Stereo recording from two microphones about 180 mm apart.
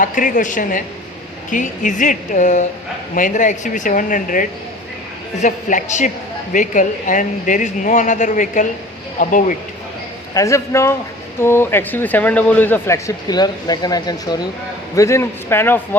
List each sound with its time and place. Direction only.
0.0 s a woman's voice: 50° left (ahead or behind)
10.3 s speech: 15° left (ahead or behind)